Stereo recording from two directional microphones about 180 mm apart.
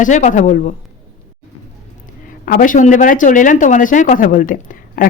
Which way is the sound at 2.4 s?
50° left (ahead or behind).